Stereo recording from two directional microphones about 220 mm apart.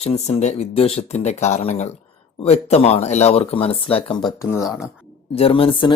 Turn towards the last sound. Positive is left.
turn(degrees=25)  # may be behind; listen again after turning